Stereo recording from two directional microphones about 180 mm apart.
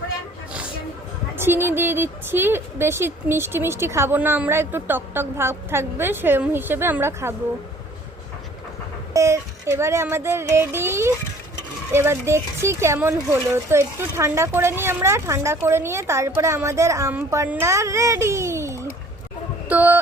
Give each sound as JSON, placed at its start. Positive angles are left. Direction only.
{"t": 1.4, "sound": "speech", "side_deg": -10}
{"t": 9.1, "sound": "speech", "side_deg": -15}
{"t": 19.6, "sound": "a sound", "side_deg": -10}